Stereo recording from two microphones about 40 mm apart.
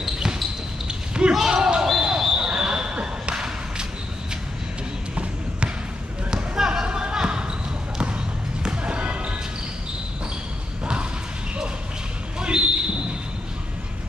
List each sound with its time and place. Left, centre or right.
0.0 s basketball bounce: centre
2.0 s a sound: centre
6.3 s basketball bounce: centre
8.6 s basketball bounce: right
12.4 s basketball bounce: right